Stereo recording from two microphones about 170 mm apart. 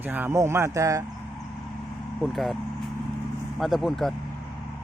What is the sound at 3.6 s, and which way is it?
Speech, centre (ahead or behind).